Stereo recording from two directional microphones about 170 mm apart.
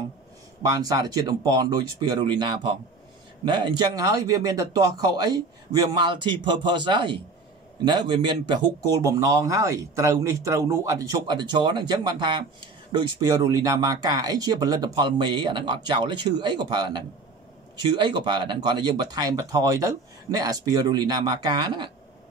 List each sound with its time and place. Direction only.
0.6 s speech: 20° right (ahead or behind)